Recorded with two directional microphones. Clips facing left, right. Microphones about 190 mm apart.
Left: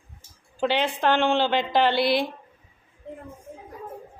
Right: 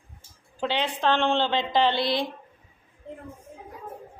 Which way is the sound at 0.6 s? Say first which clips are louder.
Left 3 dB; 10° left (ahead or behind).